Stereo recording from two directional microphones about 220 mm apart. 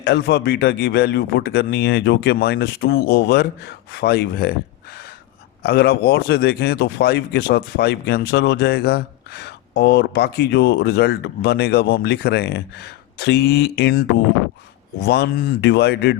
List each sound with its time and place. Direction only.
0.0 s speech: 45° left (ahead or behind)
15.0 s speech: 45° left (ahead or behind)